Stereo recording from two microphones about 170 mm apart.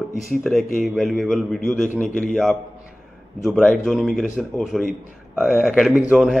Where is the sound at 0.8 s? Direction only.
Centre (ahead or behind).